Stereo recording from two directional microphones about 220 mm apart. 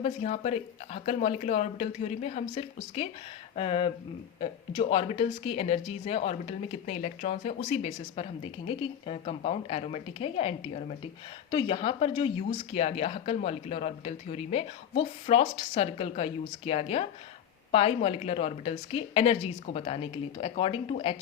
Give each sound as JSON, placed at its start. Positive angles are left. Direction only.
{"t": 0.0, "sound": "speech", "side_deg": 30}